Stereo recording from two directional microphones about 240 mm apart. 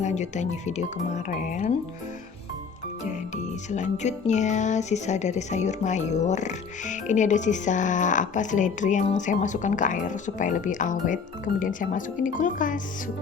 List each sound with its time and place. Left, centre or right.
0.0 s speech: left
3.7 s speech: left